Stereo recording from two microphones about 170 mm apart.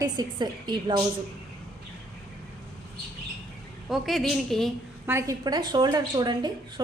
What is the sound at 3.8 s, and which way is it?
Speech, centre (ahead or behind).